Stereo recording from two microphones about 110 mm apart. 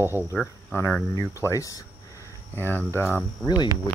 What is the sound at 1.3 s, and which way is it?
Speech, 30° left (ahead or behind).